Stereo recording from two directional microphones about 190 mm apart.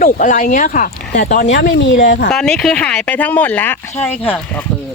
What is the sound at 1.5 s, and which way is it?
Speech, 70° left (ahead or behind).